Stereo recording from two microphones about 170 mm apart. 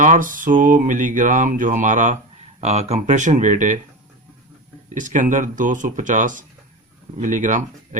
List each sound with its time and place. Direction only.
0.0 s mantra: 50° right (ahead or behind)
4.9 s mantra: 50° right (ahead or behind)